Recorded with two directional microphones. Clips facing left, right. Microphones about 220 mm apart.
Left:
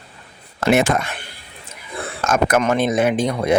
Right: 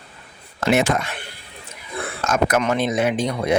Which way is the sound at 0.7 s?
50° left (ahead or behind).